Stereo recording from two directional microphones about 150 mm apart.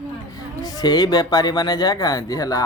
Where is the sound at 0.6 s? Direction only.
25° left (ahead or behind).